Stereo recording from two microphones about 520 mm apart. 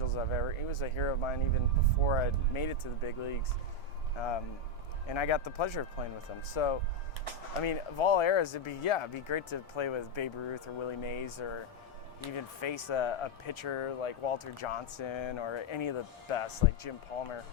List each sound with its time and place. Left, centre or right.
0.0 s speech: left